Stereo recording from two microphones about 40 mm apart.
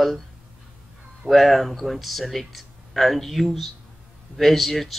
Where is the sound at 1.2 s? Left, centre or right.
Centre.